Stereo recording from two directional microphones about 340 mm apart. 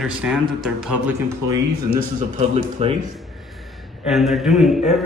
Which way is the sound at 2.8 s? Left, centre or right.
Centre.